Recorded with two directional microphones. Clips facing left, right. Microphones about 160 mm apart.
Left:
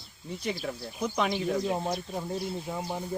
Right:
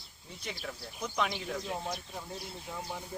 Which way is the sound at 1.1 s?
35° left (ahead or behind).